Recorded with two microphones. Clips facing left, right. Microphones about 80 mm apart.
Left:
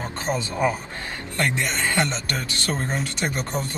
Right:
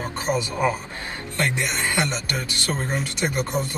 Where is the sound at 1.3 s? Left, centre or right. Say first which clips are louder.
Even; centre.